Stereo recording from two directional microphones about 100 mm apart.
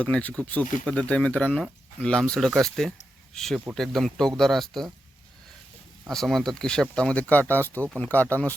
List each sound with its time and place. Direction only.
0.0 s speech: 15° left (ahead or behind)
6.1 s speech: 5° left (ahead or behind)